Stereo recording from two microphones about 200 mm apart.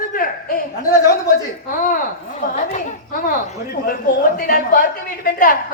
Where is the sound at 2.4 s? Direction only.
40° left (ahead or behind).